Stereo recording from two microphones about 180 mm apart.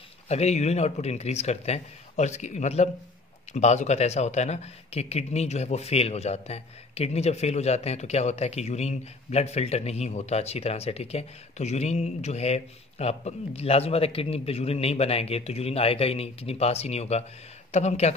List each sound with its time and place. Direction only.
0.3 s speech: 35° left (ahead or behind)